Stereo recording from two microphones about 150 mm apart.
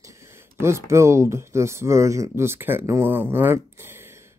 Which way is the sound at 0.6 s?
20° right (ahead or behind).